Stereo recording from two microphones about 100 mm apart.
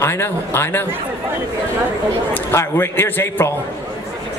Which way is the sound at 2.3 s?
25° left (ahead or behind).